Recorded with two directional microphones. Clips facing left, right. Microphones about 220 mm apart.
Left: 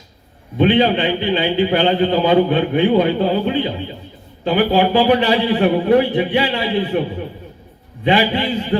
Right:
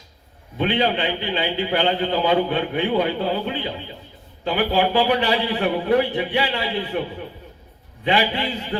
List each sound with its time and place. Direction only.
0.6 s a man's voice: 25° left (ahead or behind)
8.0 s a man's voice: 25° left (ahead or behind)